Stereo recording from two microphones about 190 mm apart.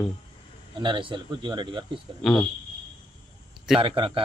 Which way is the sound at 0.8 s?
25° right (ahead or behind).